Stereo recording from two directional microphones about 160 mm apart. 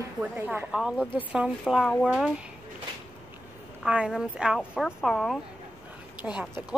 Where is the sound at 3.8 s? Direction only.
5° right (ahead or behind).